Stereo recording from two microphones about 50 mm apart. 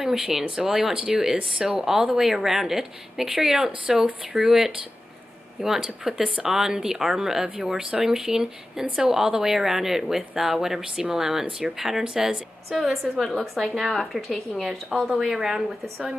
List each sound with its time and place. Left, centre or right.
0.0 s speech: centre
12.6 s speech: centre